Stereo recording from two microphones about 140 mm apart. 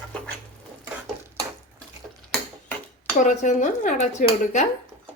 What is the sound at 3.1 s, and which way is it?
Dishes, 60° left (ahead or behind).